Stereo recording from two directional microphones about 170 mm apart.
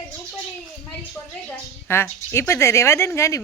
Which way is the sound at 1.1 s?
15° left (ahead or behind).